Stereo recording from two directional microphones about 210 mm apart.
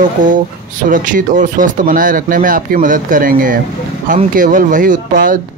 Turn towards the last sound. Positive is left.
turn(degrees=-40)  # may be behind; listen again after turning